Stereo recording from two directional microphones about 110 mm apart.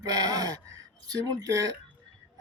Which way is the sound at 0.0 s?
35° right (ahead or behind).